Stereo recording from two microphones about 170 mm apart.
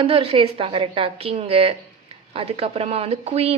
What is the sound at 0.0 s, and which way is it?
A woman's voice, 35° right (ahead or behind).